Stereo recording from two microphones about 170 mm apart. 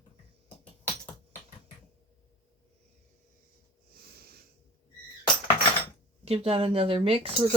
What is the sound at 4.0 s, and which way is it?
Wheeze, 65° right (ahead or behind).